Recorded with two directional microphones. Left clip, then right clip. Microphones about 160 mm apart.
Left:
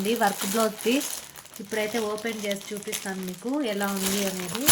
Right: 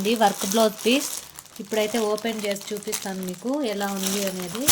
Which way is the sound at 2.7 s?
90° right.